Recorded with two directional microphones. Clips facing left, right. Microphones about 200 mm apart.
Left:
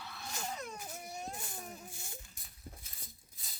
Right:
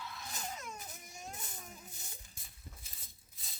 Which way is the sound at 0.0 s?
35° left (ahead or behind).